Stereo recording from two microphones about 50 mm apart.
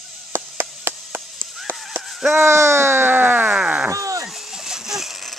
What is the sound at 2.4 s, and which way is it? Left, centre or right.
Speech, right.